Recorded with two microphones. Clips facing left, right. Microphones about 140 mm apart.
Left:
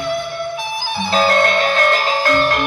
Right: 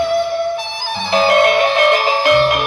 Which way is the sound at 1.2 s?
15° right (ahead or behind).